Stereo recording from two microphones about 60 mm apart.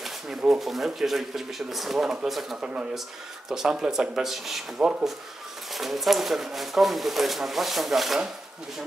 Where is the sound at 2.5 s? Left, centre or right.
Centre.